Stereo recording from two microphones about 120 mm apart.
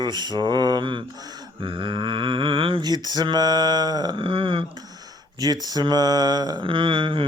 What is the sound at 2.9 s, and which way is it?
Mantra, 35° right (ahead or behind).